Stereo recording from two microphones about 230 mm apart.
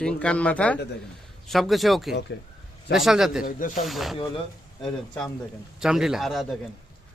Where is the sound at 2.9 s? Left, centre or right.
Centre.